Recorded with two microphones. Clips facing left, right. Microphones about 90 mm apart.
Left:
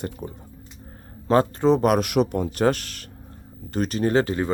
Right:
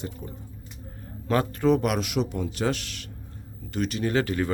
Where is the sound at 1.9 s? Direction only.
55° left (ahead or behind).